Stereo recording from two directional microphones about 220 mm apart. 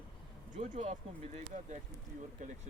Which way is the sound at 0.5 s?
30° right (ahead or behind).